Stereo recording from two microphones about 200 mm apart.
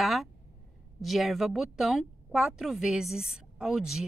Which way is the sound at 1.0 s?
Centre (ahead or behind).